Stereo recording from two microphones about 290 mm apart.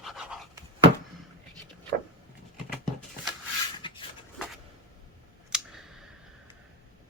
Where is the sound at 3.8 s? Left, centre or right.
Centre.